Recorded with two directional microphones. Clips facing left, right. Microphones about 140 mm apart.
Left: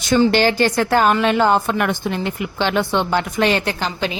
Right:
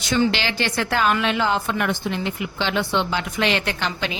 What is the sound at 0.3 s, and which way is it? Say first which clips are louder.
A woman's voice: left 8 dB; 45° left (ahead or behind).